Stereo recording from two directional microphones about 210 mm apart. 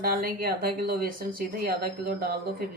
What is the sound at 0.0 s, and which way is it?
Speech, 45° right (ahead or behind).